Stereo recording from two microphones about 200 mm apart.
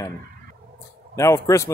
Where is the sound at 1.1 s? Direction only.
15° left (ahead or behind).